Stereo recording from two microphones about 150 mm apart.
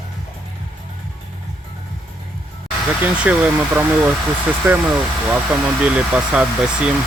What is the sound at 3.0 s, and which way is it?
Speech, 10° right (ahead or behind).